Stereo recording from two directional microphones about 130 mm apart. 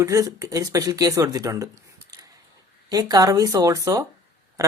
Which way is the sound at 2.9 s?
30° right (ahead or behind).